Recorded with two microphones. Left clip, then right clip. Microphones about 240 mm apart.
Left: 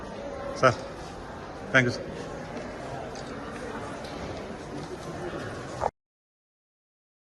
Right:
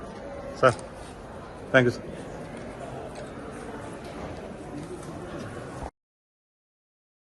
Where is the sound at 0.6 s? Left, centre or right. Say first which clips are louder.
Right 1 dB; centre.